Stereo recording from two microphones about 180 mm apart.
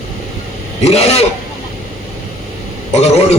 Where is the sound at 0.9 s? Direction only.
35° left (ahead or behind).